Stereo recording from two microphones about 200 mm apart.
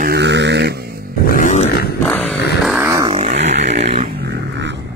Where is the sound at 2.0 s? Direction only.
10° left (ahead or behind).